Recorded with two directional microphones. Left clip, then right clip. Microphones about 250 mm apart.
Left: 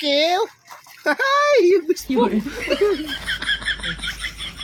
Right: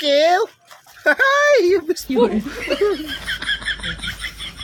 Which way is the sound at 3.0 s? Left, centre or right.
Centre.